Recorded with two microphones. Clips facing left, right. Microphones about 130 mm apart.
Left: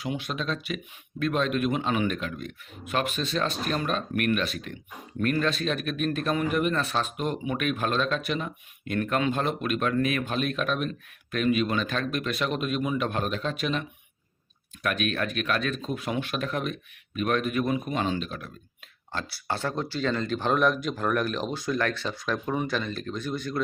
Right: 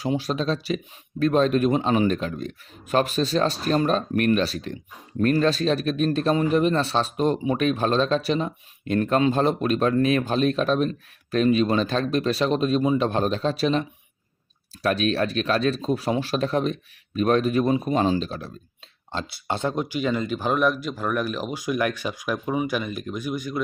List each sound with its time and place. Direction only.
0.0 s speech: 35° right (ahead or behind)
19.1 s speech: 20° right (ahead or behind)